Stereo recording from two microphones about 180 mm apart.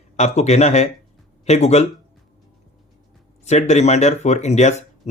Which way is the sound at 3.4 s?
40° left (ahead or behind).